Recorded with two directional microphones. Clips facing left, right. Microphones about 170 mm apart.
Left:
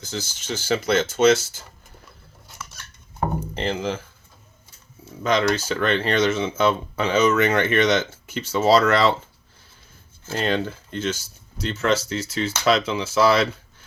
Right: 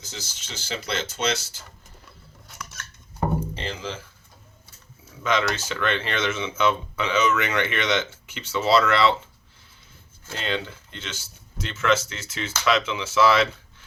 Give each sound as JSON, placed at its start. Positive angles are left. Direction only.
{"t": 0.0, "sound": "speech", "side_deg": 55}
{"t": 3.5, "sound": "dishes", "side_deg": 55}
{"t": 5.2, "sound": "speech", "side_deg": 40}
{"t": 10.3, "sound": "speech", "side_deg": 45}